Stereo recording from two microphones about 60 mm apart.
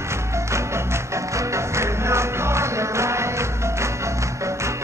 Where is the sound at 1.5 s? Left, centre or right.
Right.